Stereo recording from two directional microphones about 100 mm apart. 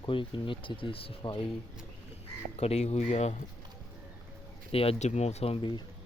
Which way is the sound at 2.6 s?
90° left.